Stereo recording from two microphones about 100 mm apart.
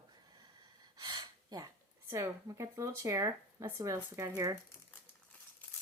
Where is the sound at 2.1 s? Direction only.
30° right (ahead or behind).